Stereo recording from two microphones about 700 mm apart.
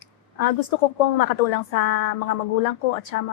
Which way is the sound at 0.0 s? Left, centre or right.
Left.